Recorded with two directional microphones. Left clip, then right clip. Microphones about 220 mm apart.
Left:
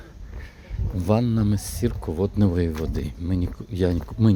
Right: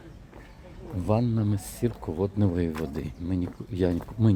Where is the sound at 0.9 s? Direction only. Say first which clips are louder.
Left 4 dB; 30° left (ahead or behind).